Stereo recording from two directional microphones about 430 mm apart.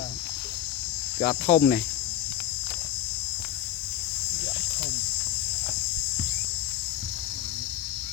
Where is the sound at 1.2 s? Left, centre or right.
Centre.